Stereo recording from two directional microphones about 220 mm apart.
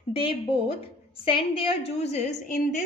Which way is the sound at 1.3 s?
25° left (ahead or behind).